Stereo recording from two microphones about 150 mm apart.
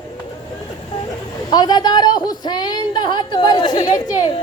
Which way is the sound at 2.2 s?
25° left (ahead or behind).